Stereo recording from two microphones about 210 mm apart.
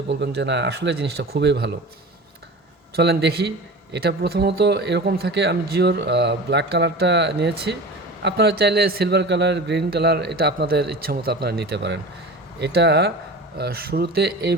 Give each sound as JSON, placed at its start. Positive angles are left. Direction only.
{"t": 0.1, "sound": "speech", "side_deg": -55}
{"t": 2.9, "sound": "speech", "side_deg": -50}